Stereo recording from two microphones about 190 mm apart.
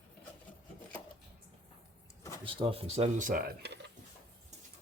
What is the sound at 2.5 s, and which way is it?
Speech, 30° right (ahead or behind).